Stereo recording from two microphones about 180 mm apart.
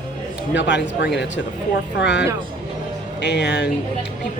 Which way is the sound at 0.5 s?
80° left.